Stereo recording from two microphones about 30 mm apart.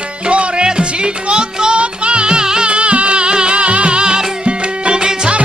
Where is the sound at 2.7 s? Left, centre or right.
Right.